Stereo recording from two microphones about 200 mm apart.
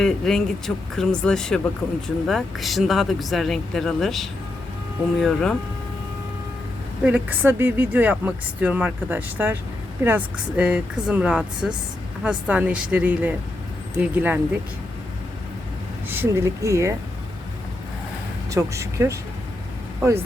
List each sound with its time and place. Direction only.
0.0 s speech: centre (ahead or behind)
7.0 s speech: 10° right (ahead or behind)
16.0 s speech: 10° right (ahead or behind)
18.5 s speech: 15° right (ahead or behind)